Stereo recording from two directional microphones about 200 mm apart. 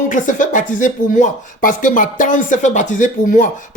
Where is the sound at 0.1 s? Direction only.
40° left (ahead or behind).